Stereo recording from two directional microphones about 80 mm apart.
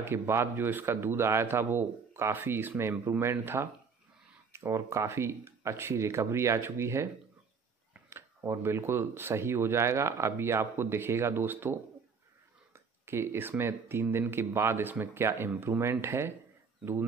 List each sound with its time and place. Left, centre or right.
0.0 s speech: right
8.1 s speech: right